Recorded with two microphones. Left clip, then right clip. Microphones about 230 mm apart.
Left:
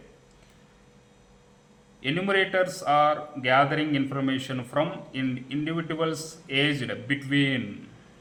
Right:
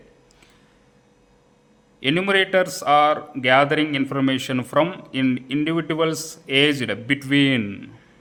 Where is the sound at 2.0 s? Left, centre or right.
Right.